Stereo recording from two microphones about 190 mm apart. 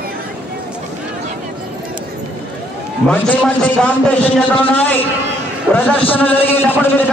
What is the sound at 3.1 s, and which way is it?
A man's voice, 10° left (ahead or behind).